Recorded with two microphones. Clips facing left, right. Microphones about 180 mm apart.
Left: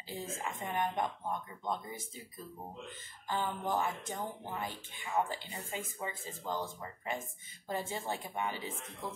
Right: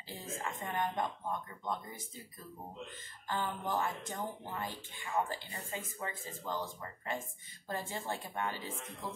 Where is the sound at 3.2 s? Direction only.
15° left (ahead or behind).